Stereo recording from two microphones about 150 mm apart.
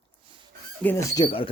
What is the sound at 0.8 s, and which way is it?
Speech, 20° left (ahead or behind).